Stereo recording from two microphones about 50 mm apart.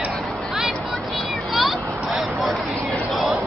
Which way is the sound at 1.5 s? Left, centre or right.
Centre.